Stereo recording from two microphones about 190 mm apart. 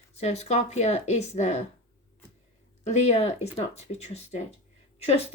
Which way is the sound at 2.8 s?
35° left (ahead or behind).